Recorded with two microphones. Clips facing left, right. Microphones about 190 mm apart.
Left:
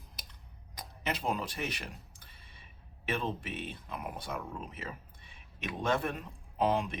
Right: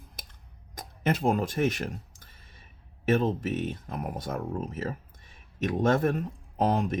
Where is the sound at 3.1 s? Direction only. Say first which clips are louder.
Right 10 dB; 45° right (ahead or behind).